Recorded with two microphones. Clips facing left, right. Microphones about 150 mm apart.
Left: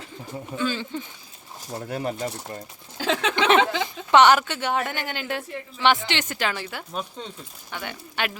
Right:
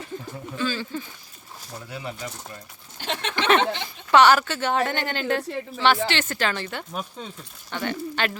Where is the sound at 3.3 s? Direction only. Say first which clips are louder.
Left 3 dB; 90° left.